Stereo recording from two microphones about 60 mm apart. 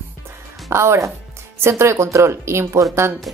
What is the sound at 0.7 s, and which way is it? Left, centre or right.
A woman's voice, right.